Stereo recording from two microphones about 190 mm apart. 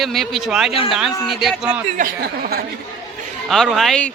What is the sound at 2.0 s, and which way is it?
Speech, 50° right (ahead or behind).